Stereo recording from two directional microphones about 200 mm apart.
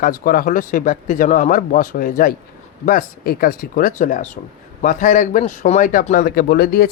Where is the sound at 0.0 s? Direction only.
45° left (ahead or behind).